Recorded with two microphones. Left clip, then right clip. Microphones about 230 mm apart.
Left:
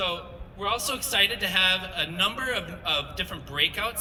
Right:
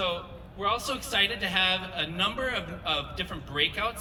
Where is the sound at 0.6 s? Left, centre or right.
Left.